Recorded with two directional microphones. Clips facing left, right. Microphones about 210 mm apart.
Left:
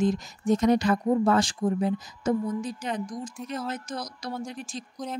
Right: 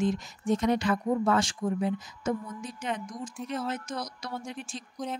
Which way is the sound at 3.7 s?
35° left (ahead or behind).